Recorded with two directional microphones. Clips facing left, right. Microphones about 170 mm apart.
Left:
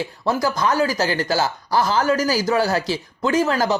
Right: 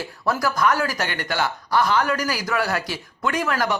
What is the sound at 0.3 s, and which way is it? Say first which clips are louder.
Speech: left 1 dB; 20° left (ahead or behind).